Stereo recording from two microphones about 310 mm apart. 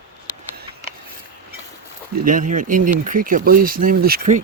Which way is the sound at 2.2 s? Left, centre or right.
Right.